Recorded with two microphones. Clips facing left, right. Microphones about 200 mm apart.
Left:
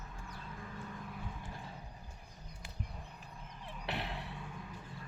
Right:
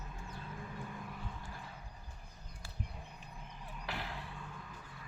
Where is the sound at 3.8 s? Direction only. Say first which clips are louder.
Left 3 dB; 25° left (ahead or behind).